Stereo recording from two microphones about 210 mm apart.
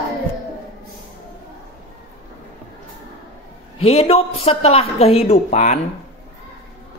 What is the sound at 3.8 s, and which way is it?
Speech, 30° left (ahead or behind).